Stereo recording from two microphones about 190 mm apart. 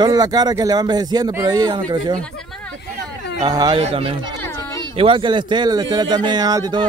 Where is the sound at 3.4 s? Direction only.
20° right (ahead or behind).